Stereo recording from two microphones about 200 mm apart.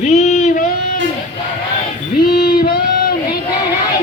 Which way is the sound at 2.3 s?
45° left (ahead or behind).